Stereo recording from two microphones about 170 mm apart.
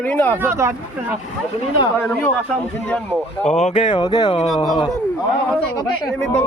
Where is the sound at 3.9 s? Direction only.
25° left (ahead or behind).